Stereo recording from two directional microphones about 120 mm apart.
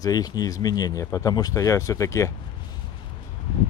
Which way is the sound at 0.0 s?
30° left (ahead or behind).